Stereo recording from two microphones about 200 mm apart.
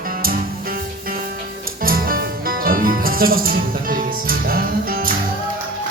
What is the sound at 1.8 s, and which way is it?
Music, 45° right (ahead or behind).